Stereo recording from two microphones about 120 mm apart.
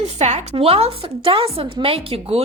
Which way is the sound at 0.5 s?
55° right (ahead or behind).